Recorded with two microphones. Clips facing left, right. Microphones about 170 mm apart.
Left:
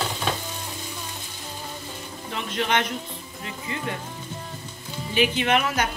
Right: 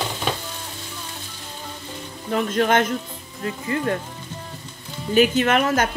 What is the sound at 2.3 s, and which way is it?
Speech, 45° right (ahead or behind).